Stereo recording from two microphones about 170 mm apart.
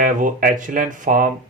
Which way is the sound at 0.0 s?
55° right (ahead or behind).